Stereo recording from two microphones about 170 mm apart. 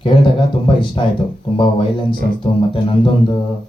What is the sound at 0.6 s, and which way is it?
A man's voice, 30° left (ahead or behind).